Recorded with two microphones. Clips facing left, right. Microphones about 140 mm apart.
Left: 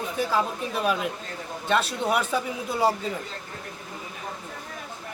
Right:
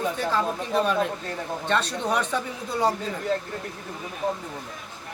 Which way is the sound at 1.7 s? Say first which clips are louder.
Left 2 dB; 5° left (ahead or behind).